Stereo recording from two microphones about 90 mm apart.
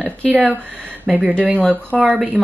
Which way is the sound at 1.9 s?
5° left (ahead or behind).